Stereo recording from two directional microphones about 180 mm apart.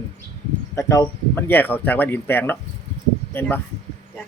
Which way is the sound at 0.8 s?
15° left (ahead or behind).